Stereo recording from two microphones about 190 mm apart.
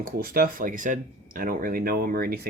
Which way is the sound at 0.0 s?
50° right (ahead or behind).